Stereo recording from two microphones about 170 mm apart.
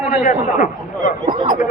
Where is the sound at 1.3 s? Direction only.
45° right (ahead or behind).